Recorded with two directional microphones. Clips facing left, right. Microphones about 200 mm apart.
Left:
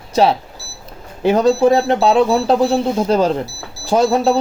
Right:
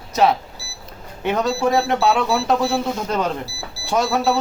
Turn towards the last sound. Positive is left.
turn(degrees=30)  # may be behind; listen again after turning